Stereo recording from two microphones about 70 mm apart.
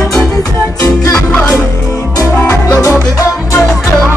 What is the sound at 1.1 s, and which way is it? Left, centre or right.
Music, centre.